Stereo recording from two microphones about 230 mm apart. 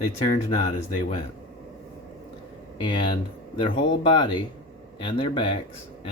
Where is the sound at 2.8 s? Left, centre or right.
Left.